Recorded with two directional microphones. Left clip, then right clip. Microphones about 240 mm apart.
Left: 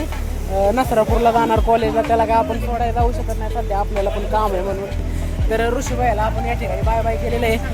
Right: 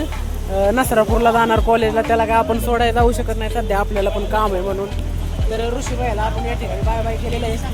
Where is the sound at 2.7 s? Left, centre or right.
Right.